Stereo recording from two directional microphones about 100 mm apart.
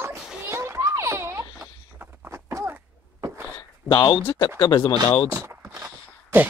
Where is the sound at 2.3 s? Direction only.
25° right (ahead or behind).